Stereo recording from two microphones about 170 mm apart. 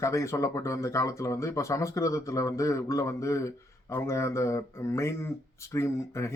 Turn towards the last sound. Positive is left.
turn(degrees=15)  # may be behind; listen again after turning